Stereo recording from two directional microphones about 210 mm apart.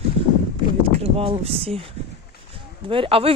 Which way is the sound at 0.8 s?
30° right (ahead or behind).